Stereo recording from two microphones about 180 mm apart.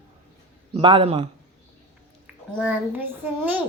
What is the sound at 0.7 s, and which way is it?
Speech, 30° right (ahead or behind).